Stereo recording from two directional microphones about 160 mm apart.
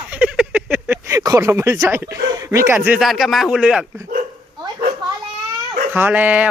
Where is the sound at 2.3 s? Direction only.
20° right (ahead or behind).